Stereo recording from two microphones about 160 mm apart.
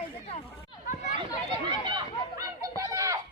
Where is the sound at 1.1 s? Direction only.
30° right (ahead or behind).